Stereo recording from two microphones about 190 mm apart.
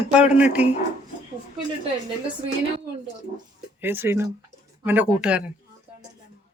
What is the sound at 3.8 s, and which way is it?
Speech, 10° right (ahead or behind).